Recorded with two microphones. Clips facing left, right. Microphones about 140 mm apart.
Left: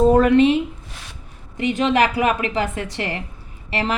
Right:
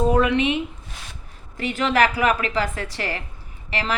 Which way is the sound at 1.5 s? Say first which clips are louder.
Left 3 dB; 20° left (ahead or behind).